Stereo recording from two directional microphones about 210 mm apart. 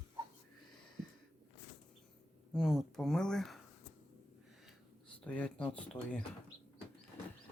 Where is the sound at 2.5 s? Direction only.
Centre (ahead or behind).